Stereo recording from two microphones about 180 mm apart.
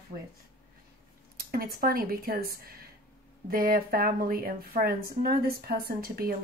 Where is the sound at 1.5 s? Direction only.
55° right (ahead or behind).